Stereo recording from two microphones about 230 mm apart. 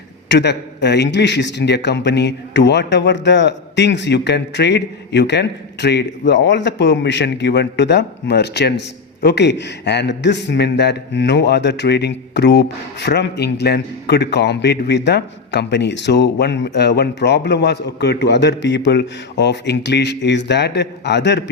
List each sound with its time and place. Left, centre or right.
0.3 s a man's voice: left